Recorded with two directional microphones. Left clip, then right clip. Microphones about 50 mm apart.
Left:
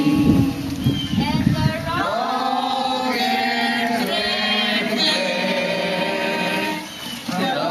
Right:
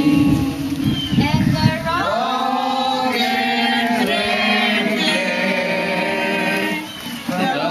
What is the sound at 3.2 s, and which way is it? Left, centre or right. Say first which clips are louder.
Chant: right 2 dB; left.